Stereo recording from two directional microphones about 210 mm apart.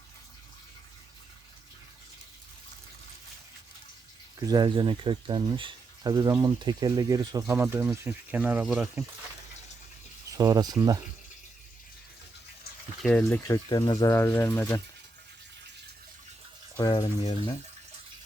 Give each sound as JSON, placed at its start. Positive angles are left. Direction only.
{"t": 4.4, "sound": "speech", "side_deg": -20}
{"t": 10.3, "sound": "speech", "side_deg": -15}
{"t": 13.0, "sound": "speech", "side_deg": 5}
{"t": 16.7, "sound": "speech", "side_deg": 20}